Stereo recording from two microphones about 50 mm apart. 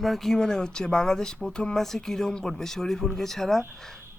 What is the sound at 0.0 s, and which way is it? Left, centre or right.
Speech, centre.